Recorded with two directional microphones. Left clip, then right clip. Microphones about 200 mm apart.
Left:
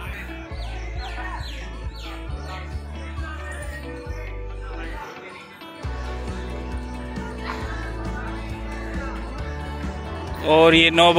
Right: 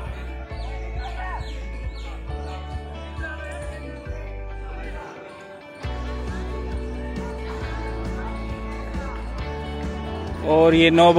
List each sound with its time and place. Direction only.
8.9 s music: centre (ahead or behind)
10.4 s music: 15° right (ahead or behind)